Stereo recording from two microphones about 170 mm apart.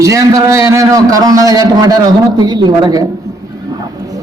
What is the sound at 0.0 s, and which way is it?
A man's voice, 20° right (ahead or behind).